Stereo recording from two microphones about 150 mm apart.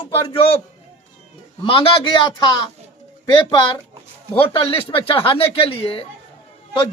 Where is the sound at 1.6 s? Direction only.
35° left (ahead or behind).